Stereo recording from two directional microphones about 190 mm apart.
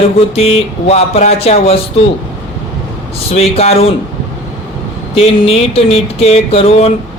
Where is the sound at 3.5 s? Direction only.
30° left (ahead or behind).